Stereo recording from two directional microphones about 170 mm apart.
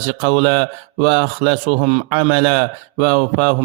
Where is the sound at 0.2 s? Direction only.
55° right (ahead or behind).